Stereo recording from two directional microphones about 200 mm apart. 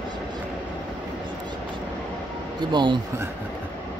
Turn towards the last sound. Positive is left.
turn(degrees=-20)  # may be behind; listen again after turning